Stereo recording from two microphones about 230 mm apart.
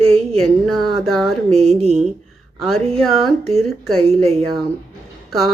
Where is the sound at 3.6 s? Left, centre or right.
Centre.